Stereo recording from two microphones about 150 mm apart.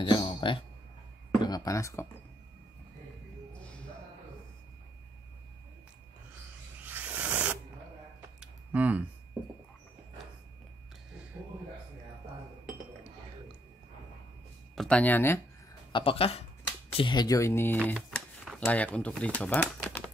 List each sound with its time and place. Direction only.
0.0 s a sound: 35° left (ahead or behind)
1.4 s speech: 25° left (ahead or behind)
6.8 s a sound: 10° right (ahead or behind)
14.8 s speech: 10° left (ahead or behind)
15.9 s speech: 40° left (ahead or behind); by 17.7 s 15° left (ahead or behind)
17.8 s speech: 5° left (ahead or behind)